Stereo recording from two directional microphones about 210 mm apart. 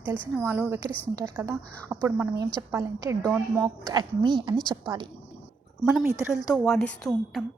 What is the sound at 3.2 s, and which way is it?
Speech, 5° left (ahead or behind).